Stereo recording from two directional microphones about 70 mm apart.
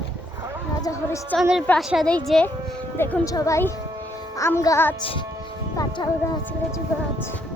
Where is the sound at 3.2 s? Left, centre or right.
Left.